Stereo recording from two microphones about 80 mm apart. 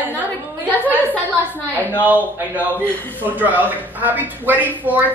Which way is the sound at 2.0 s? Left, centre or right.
Right.